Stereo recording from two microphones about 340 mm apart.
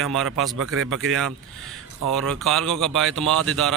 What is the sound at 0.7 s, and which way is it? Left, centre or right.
Speech, right.